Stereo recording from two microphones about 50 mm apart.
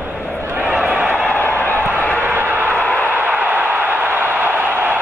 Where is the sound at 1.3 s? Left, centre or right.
Left.